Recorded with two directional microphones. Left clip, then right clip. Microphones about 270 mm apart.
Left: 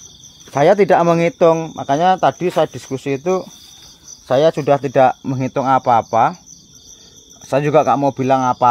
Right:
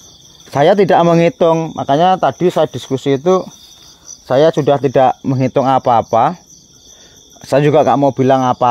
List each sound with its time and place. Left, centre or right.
0.5 s speech: right
7.4 s speech: right